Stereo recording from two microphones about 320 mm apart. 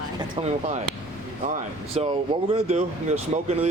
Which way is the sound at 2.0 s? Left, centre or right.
Centre.